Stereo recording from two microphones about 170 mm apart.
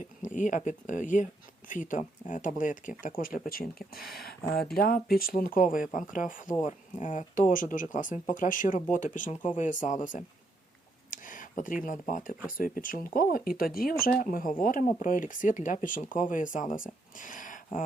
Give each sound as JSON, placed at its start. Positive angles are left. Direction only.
{"t": 0.2, "sound": "speech", "side_deg": 45}